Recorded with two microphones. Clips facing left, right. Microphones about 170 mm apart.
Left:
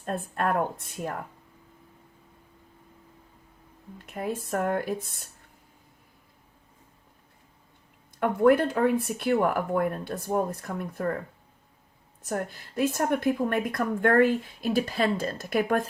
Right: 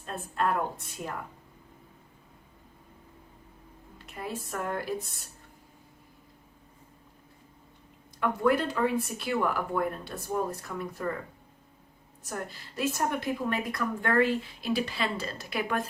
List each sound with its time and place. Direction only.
0.0 s a woman's voice: 55° left (ahead or behind)
3.9 s a woman's voice: 50° left (ahead or behind)
8.2 s a woman's voice: 55° left (ahead or behind)
12.2 s a woman's voice: 55° left (ahead or behind)